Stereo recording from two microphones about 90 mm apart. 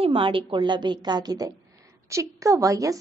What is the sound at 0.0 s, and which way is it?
A woman's voice, 85° right.